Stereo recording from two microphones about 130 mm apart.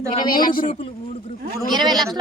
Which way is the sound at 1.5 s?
35° right (ahead or behind).